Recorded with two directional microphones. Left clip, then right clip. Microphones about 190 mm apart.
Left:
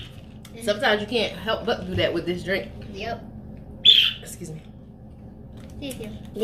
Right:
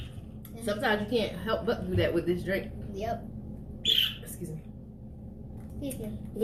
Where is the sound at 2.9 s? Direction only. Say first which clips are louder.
Left 2 dB; 15° right (ahead or behind).